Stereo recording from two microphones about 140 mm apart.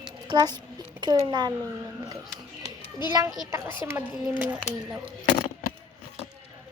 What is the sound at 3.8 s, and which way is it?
Speech, 15° right (ahead or behind).